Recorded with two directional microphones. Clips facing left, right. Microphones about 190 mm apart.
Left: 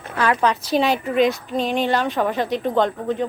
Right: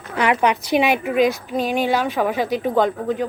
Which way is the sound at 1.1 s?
Centre (ahead or behind).